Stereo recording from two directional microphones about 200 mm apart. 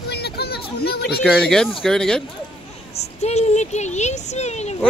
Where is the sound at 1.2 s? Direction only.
5° left (ahead or behind).